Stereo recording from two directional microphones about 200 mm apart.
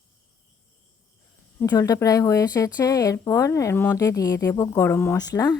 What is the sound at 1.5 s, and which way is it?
Speech, 15° left (ahead or behind).